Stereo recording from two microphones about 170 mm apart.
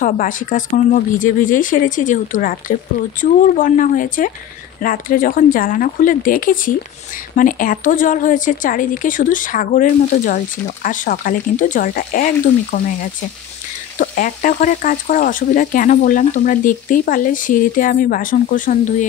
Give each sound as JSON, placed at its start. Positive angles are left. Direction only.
{"t": 0.0, "sound": "speech", "side_deg": 50}
{"t": 13.9, "sound": "speech", "side_deg": 50}